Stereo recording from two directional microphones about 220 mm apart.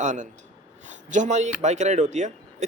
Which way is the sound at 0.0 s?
35° right (ahead or behind).